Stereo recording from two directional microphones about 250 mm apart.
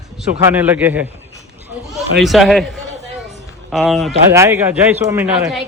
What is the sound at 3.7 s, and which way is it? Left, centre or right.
A man's voice, centre.